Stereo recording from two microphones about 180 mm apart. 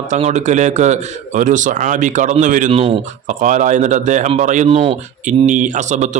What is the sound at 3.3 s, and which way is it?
Speech, 45° right (ahead or behind).